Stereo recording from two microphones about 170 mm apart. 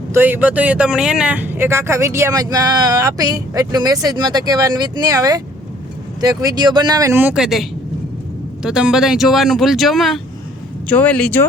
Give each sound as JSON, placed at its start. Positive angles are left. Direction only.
{"t": 0.1, "sound": "speech", "side_deg": -10}